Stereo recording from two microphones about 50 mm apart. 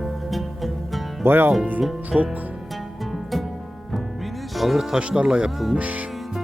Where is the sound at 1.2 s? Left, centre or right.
Right.